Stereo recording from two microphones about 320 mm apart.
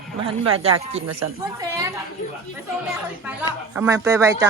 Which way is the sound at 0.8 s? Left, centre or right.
Centre.